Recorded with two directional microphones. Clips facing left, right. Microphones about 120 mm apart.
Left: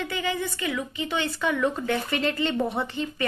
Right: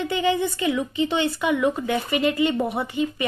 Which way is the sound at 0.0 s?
25° right (ahead or behind).